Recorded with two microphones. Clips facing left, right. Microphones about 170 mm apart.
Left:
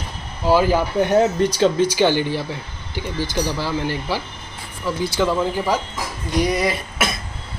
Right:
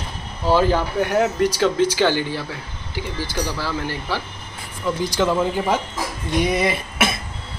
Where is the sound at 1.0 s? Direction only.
25° left (ahead or behind).